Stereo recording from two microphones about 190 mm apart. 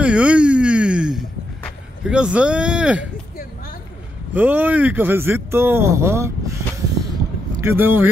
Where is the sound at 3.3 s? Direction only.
50° left (ahead or behind).